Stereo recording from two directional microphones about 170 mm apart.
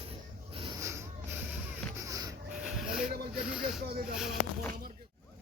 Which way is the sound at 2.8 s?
5° right (ahead or behind).